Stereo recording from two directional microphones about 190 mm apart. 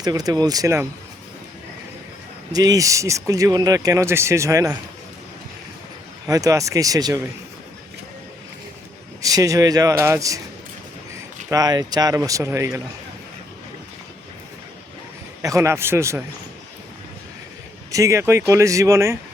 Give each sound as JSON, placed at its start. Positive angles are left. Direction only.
{"t": 0.0, "sound": "speech", "side_deg": -20}
{"t": 2.5, "sound": "speech", "side_deg": -20}
{"t": 6.2, "sound": "speech", "side_deg": -20}
{"t": 9.2, "sound": "speech", "side_deg": -20}
{"t": 11.4, "sound": "speech", "side_deg": -20}
{"t": 15.4, "sound": "speech", "side_deg": -15}
{"t": 17.9, "sound": "speech", "side_deg": -15}